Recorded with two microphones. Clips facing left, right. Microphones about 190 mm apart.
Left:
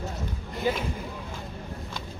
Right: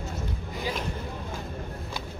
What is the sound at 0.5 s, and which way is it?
Speech, 5° left (ahead or behind).